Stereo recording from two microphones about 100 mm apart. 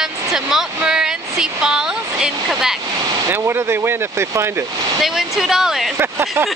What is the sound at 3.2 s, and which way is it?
Speech, 25° right (ahead or behind).